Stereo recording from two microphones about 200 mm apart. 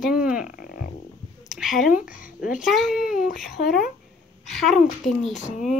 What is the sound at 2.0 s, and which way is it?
Speech, 40° left (ahead or behind).